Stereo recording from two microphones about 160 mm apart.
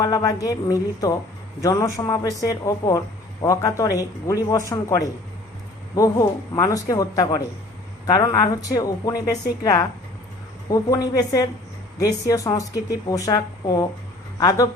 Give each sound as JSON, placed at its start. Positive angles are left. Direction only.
{"t": 0.0, "sound": "speech", "side_deg": 20}